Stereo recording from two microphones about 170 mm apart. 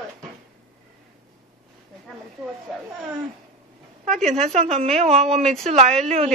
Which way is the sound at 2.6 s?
Centre (ahead or behind).